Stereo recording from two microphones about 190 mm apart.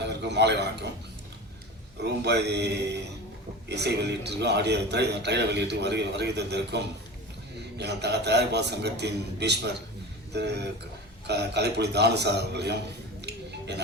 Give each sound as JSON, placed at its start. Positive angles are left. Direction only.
{"t": 0.0, "sound": "speech", "side_deg": -65}
{"t": 2.0, "sound": "a man's voice", "side_deg": -60}
{"t": 13.2, "sound": "music", "side_deg": -60}